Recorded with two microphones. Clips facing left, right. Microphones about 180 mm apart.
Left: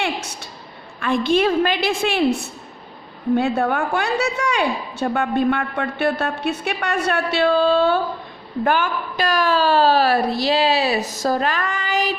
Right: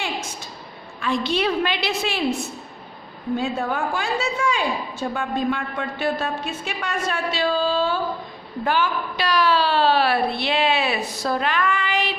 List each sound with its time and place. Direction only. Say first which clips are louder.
0.9 s a woman's voice: left 5 dB; 55° left (ahead or behind)
3.3 s a woman's voice: left 5 dB; 65° left (ahead or behind)
8.6 s a woman's voice: left 2 dB; 50° left (ahead or behind)